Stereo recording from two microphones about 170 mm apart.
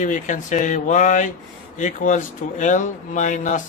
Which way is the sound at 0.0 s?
50° left (ahead or behind).